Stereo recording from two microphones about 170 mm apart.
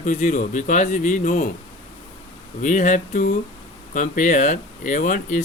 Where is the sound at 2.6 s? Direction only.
45° left (ahead or behind).